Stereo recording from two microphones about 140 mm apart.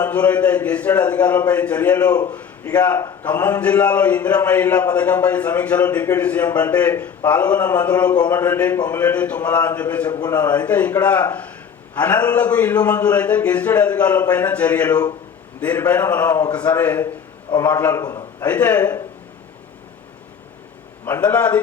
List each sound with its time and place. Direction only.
0.0 s a man's voice: 10° left (ahead or behind)
18.0 s a sound: 25° left (ahead or behind)
18.4 s a man's voice: 10° left (ahead or behind)
21.0 s a man's voice: 10° left (ahead or behind)